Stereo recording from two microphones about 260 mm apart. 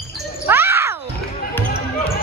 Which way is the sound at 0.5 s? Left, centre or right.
Centre.